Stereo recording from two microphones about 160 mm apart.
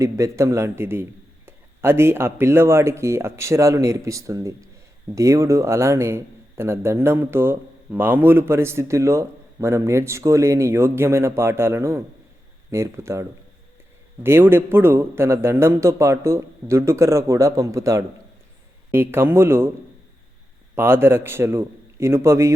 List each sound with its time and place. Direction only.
0.0 s a man's voice: 20° right (ahead or behind)
14.3 s a man's voice: 15° right (ahead or behind)
20.7 s a man's voice: 15° right (ahead or behind)